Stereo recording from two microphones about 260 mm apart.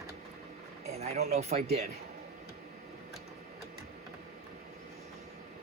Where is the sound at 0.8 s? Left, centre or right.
Right.